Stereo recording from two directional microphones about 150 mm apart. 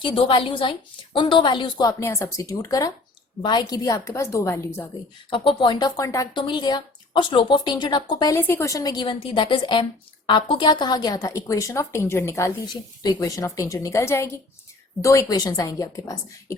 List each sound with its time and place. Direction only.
0.0 s a woman's voice: 35° left (ahead or behind); by 4.9 s 20° left (ahead or behind)
5.3 s a woman's voice: 35° left (ahead or behind)
8.4 s a woman's voice: 15° left (ahead or behind)